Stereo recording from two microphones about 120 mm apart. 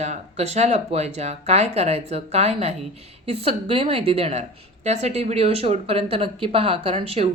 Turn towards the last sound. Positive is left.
turn(degrees=-55)  # may be behind; listen again after turning